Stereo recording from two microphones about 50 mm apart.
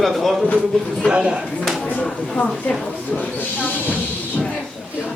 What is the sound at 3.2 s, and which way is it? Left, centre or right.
Train, left.